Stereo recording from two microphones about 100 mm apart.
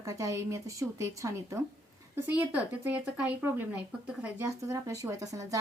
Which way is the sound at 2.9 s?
15° right (ahead or behind).